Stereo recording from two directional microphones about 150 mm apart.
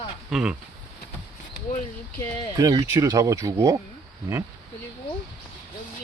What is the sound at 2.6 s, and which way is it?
Speech, 25° right (ahead or behind).